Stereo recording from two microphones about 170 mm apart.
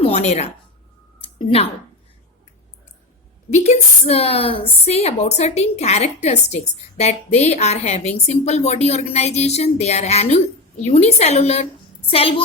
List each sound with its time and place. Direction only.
0.0 s a sound: 40° left (ahead or behind)
1.4 s speech: 30° left (ahead or behind)
3.5 s a woman's voice: 40° left (ahead or behind)